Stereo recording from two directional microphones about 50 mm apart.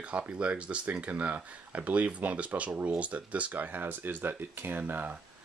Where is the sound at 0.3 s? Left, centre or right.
Right.